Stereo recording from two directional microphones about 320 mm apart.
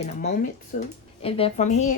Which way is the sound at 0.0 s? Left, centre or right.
Left.